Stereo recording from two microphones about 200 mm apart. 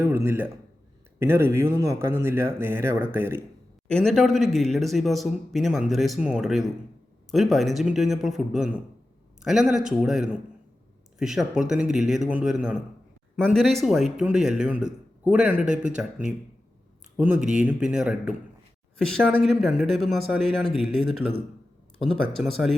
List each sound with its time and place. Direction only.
0.0 s speech: 15° right (ahead or behind)
3.8 s a man's voice: 5° left (ahead or behind)
15.6 s speech: 40° right (ahead or behind)
17.2 s speech: 5° right (ahead or behind)